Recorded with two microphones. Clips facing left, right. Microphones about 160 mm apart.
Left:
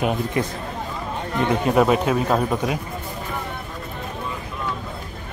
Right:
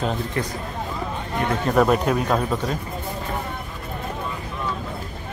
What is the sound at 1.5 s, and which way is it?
Speech, 15° left (ahead or behind).